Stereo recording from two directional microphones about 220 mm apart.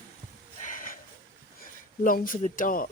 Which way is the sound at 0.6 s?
35° left (ahead or behind).